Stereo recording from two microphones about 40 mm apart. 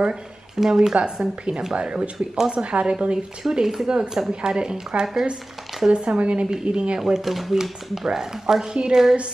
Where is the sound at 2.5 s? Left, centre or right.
Right.